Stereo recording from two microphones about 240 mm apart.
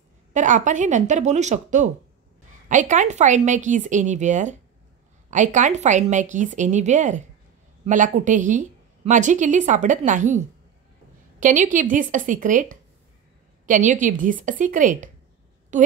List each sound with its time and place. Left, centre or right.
0.3 s a woman's voice: right